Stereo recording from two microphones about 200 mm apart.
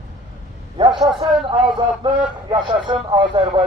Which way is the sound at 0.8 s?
25° right (ahead or behind).